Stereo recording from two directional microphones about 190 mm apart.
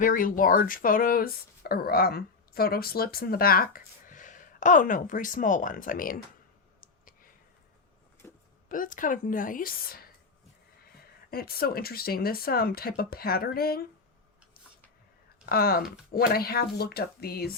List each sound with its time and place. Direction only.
0.0 s speech: 45° left (ahead or behind)
8.2 s a sound: 10° left (ahead or behind)
8.7 s speech: 45° left (ahead or behind)
11.3 s speech: 50° left (ahead or behind)
15.4 s speech: 50° left (ahead or behind)